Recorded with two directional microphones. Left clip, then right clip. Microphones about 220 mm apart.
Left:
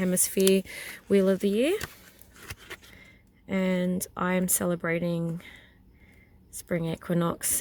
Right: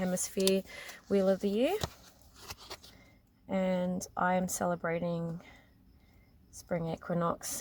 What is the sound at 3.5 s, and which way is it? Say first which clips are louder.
Speech: left 3 dB; 55° left (ahead or behind).